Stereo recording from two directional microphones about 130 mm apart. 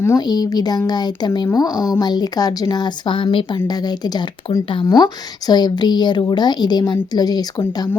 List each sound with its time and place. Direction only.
0.2 s a woman's voice: 30° left (ahead or behind)